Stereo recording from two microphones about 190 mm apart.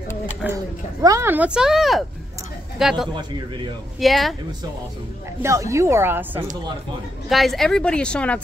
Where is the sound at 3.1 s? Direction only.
25° right (ahead or behind).